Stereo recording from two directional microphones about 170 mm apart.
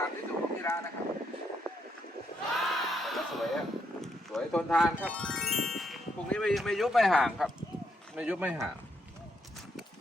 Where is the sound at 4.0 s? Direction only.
Centre (ahead or behind).